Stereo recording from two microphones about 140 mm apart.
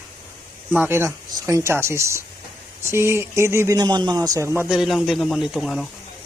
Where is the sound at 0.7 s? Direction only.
15° right (ahead or behind).